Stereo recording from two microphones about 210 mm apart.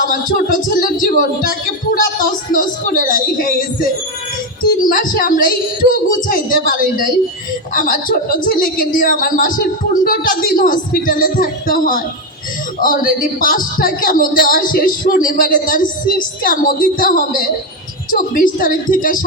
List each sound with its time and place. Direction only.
0.1 s speech: 40° left (ahead or behind)